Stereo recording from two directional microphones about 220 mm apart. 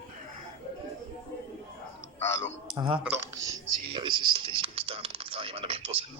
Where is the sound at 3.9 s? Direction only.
20° right (ahead or behind).